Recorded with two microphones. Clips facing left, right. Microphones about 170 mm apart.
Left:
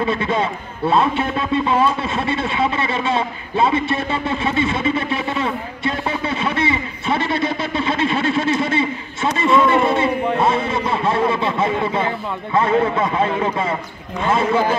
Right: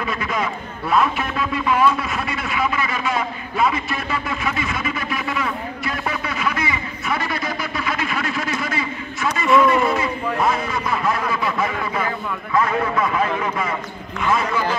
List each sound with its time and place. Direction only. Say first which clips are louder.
0.0 s a man's voice: left 5 dB; 30° left (ahead or behind)